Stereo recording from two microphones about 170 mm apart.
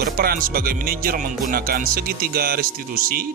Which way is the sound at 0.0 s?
60° right (ahead or behind).